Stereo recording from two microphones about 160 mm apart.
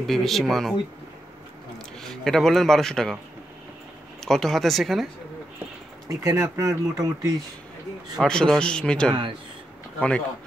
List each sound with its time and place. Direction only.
0.0 s a man's voice: centre (ahead or behind)
2.0 s a man's voice: 5° left (ahead or behind)
4.2 s a man's voice: centre (ahead or behind)
6.0 s speech: 20° right (ahead or behind)
8.2 s a man's voice: 5° left (ahead or behind)